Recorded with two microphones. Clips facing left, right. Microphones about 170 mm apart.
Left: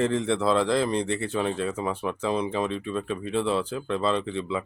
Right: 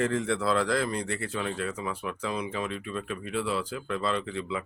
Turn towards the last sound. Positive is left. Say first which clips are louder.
# left 4 dB
turn(degrees=25)  # may be behind; listen again after turning